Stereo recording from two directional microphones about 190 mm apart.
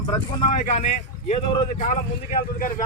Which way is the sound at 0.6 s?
45° left (ahead or behind).